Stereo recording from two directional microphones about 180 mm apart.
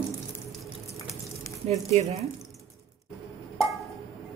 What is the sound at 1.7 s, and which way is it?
Speech, 40° right (ahead or behind).